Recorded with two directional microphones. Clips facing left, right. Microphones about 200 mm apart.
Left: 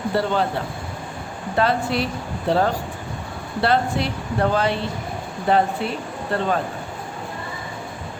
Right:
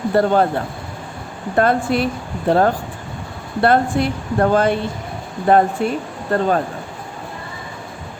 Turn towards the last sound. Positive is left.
turn(degrees=-45)  # may be behind; listen again after turning